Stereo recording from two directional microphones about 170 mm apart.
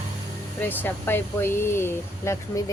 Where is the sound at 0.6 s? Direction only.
10° left (ahead or behind).